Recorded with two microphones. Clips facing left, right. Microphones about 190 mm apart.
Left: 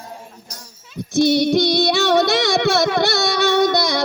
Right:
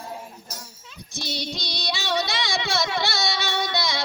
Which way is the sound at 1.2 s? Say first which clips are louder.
Left 18 dB; 60° left (ahead or behind).